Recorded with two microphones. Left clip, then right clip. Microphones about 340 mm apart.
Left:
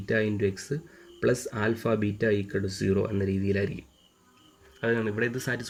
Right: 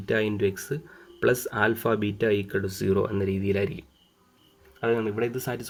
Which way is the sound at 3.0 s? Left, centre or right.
Right.